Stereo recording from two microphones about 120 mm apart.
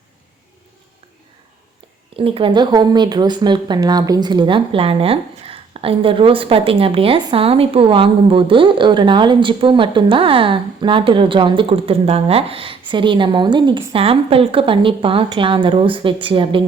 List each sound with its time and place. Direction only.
2.1 s speech: 50° right (ahead or behind)